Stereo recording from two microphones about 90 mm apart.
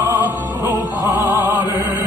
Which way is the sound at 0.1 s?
25° right (ahead or behind).